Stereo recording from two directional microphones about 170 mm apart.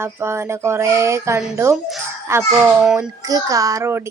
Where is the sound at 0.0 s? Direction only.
15° right (ahead or behind).